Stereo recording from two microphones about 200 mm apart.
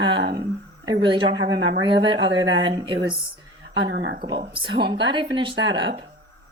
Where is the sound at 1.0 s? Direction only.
25° right (ahead or behind).